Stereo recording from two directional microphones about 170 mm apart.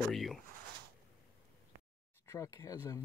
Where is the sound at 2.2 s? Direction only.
15° left (ahead or behind).